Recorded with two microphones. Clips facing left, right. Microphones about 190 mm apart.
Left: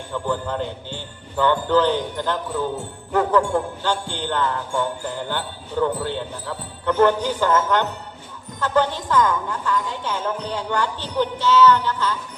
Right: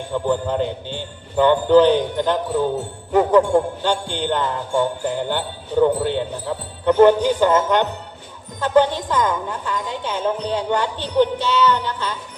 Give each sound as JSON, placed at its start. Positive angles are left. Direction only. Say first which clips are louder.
{"t": 0.1, "sound": "jingle bell", "louder": "right 4 dB", "side_deg": -20}